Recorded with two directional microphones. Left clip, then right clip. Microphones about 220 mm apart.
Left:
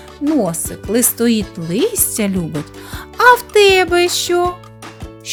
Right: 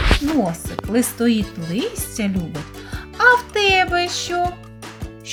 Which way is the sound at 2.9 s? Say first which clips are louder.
Left 4 dB; 50° left (ahead or behind).